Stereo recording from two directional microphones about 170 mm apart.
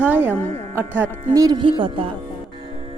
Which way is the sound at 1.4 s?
25° right (ahead or behind).